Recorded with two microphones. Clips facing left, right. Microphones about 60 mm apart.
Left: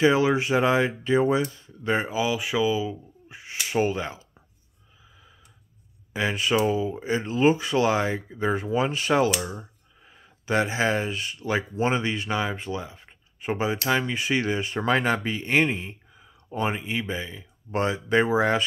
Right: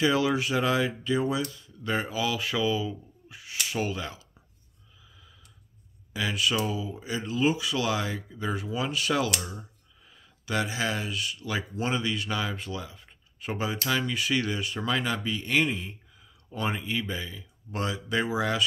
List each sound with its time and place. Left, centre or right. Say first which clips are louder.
0.0 s speech: left 4 dB; left
3.3 s a sound: left 3 dB; left
3.6 s speech: left 6 dB; left
6.1 s speech: left 4 dB; left